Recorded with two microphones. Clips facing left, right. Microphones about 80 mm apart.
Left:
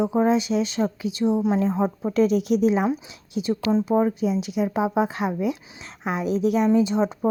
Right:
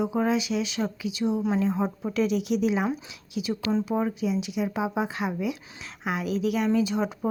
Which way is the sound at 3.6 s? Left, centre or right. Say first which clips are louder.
Left 4 dB; left.